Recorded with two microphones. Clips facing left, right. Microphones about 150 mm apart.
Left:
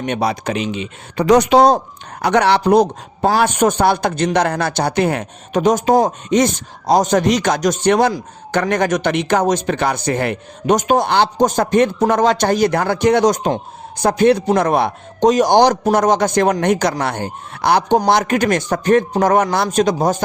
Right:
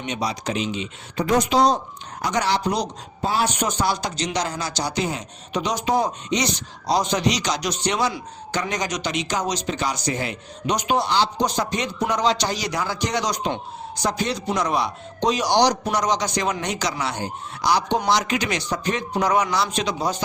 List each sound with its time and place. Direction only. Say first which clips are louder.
0.0 s speech: left 7 dB; 55° left (ahead or behind)